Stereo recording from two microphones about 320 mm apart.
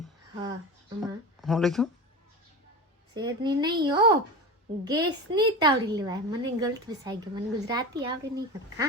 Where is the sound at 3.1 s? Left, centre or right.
Centre.